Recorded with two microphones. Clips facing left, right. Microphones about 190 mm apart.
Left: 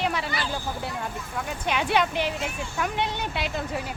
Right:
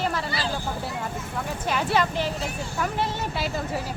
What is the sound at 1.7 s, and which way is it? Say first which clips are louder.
A woman's voice: even; centre (ahead or behind).